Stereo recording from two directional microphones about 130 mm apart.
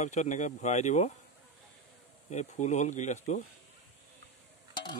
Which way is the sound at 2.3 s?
60° left (ahead or behind).